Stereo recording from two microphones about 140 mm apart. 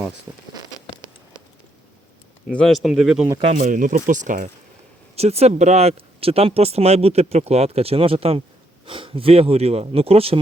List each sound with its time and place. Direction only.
2.5 s speech: 5° left (ahead or behind)
3.4 s speech: 65° right (ahead or behind)
5.1 s speech: 50° right (ahead or behind)